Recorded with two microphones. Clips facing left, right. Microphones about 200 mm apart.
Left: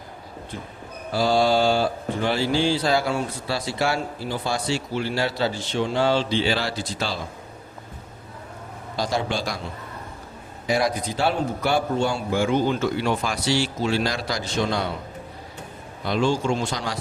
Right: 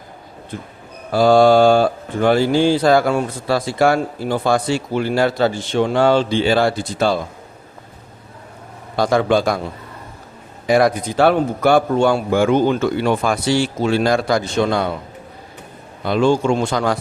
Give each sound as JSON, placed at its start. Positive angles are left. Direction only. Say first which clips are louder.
{"t": 0.5, "sound": "speech", "louder": "right 5 dB", "side_deg": -50}
{"t": 9.0, "sound": "a man's voice", "louder": "right 10 dB", "side_deg": -55}
{"t": 10.7, "sound": "a man's voice", "louder": "right 8 dB", "side_deg": -55}
{"t": 16.0, "sound": "a man's voice", "louder": "right 6 dB", "side_deg": -55}